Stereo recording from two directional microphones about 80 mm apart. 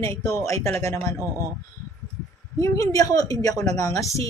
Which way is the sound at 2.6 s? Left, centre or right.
Left.